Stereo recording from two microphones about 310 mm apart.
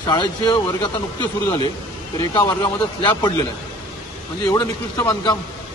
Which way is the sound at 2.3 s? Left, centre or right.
Centre.